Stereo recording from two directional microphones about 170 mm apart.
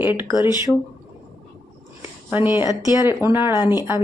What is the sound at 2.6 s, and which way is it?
Speech, 20° left (ahead or behind).